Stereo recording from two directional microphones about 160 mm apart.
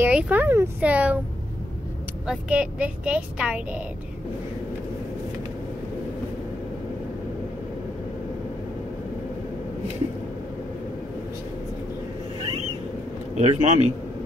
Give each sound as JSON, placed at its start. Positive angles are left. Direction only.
{"t": 0.0, "sound": "a woman's voice", "side_deg": -10}
{"t": 2.2, "sound": "a woman's voice", "side_deg": -5}
{"t": 13.4, "sound": "a man's voice", "side_deg": -40}